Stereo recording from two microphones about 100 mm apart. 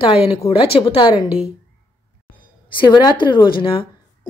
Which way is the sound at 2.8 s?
45° left (ahead or behind).